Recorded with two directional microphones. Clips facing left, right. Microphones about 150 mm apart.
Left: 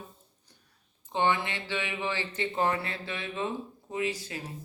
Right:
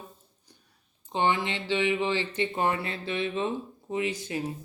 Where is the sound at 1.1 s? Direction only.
20° right (ahead or behind).